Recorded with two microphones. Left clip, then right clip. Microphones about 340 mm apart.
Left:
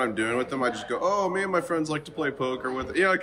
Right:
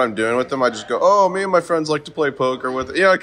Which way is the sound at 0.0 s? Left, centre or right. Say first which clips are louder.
Right 8 dB; centre.